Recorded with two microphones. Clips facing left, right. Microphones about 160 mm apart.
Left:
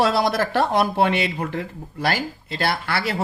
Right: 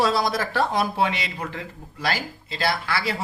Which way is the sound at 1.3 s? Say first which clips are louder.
Left 5 dB; 45° left (ahead or behind).